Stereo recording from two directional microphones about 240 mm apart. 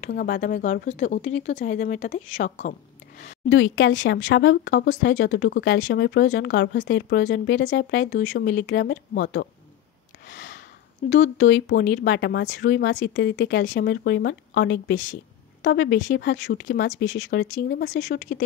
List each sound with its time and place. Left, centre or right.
0.0 s speech: left
3.4 s speech: left
10.2 s a sound: left
11.1 s speech: left